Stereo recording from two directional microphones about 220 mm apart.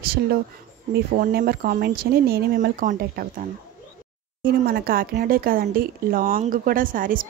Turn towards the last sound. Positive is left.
turn(degrees=-40)  # may be behind; listen again after turning